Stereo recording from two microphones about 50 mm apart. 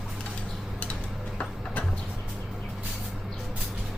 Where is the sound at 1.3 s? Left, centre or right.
Left.